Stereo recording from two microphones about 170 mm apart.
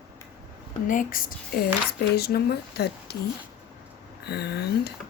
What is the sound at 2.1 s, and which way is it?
Speech, 70° left (ahead or behind).